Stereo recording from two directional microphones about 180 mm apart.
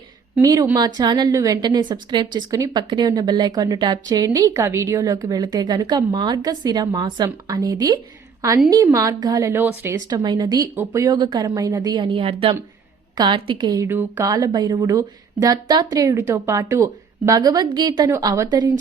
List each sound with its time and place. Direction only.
0.3 s a woman's voice: 20° right (ahead or behind)